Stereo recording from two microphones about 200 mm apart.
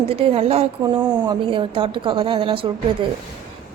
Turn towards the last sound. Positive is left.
turn(degrees=-25)  # may be behind; listen again after turning